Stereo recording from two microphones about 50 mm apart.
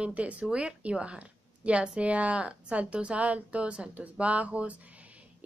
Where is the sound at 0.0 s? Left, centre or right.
Right.